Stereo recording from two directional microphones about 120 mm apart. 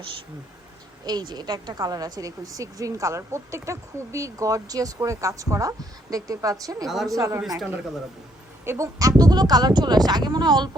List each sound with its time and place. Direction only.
1.0 s a woman's voice: 35° right (ahead or behind)
6.8 s speech: centre (ahead or behind)
7.2 s a woman's voice: 20° right (ahead or behind)
8.6 s a woman's voice: 25° right (ahead or behind)